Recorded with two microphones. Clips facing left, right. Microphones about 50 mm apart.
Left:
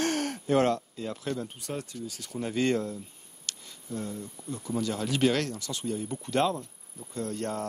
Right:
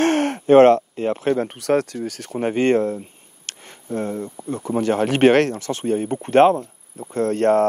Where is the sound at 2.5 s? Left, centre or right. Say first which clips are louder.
Right 9 dB; right.